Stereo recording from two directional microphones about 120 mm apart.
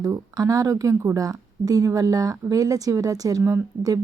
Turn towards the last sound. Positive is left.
turn(degrees=-25)  # may be behind; listen again after turning